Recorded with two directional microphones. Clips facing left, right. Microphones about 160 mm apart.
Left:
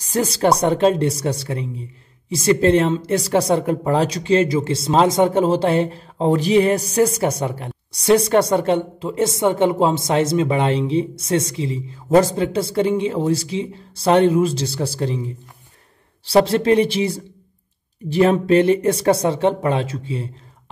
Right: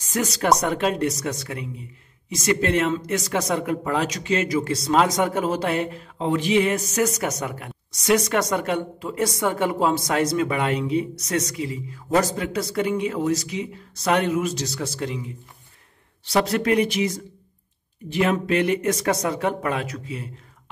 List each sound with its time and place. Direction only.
0.0 s speech: 35° left (ahead or behind)